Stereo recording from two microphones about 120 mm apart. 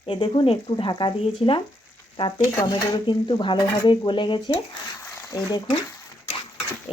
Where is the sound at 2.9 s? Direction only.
40° left (ahead or behind).